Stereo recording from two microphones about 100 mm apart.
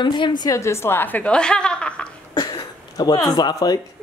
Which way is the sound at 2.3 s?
45° left (ahead or behind).